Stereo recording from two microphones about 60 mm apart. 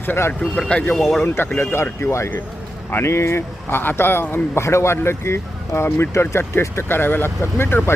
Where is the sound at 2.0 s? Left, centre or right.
Left.